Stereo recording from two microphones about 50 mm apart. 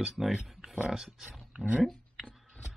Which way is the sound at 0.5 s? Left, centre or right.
Centre.